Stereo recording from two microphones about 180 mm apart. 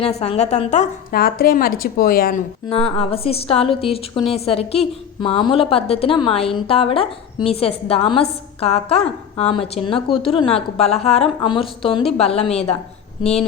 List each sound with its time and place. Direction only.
0.0 s speech: 35° left (ahead or behind)
1.1 s speech: 55° left (ahead or behind)
2.6 s speech: 35° left (ahead or behind)